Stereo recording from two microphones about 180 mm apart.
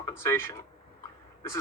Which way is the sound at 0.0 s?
15° left (ahead or behind).